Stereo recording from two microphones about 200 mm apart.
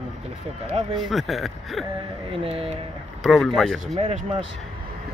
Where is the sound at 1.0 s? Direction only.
Centre (ahead or behind).